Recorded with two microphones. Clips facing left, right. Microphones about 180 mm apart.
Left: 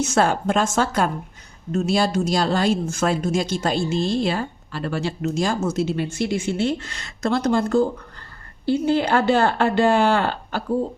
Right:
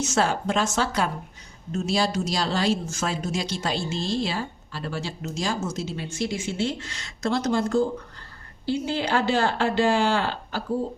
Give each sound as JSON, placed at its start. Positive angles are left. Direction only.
{"t": 0.0, "sound": "a woman's voice", "side_deg": 55}